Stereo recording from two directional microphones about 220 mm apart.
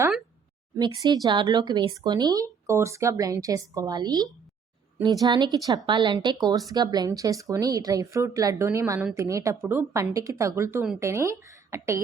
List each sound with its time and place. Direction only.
1.0 s a woman's voice: 20° right (ahead or behind)